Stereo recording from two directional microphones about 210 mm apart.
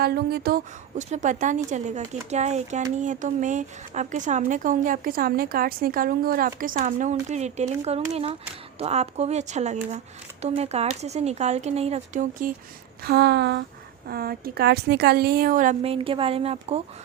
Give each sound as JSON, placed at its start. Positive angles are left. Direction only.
{"t": 0.0, "sound": "speech", "side_deg": -50}
{"t": 13.1, "sound": "a woman's voice", "side_deg": -50}